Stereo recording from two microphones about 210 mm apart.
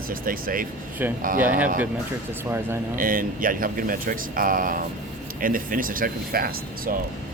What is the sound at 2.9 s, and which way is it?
Speech, 40° right (ahead or behind).